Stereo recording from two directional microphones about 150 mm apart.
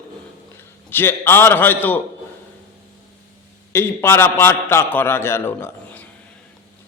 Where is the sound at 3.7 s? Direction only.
15° left (ahead or behind).